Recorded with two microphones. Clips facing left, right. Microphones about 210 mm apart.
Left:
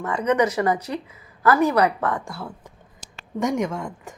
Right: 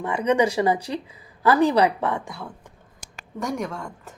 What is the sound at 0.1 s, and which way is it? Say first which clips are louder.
Speech: even; 10° right (ahead or behind).